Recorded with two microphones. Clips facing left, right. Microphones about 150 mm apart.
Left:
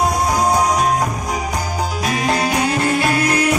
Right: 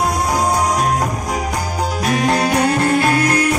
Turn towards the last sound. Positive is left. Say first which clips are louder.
# right 3 dB
turn(degrees=-50)  # may be behind; listen again after turning